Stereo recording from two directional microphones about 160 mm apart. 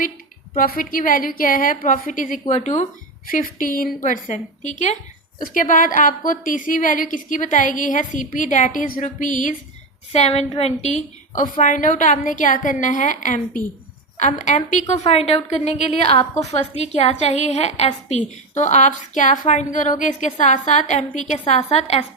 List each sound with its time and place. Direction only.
0.5 s a woman's voice: 60° left (ahead or behind)
3.2 s a woman's voice: 60° left (ahead or behind)
10.1 s a woman's voice: 40° left (ahead or behind)